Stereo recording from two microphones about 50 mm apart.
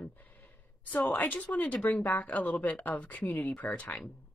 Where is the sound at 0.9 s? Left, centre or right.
Left.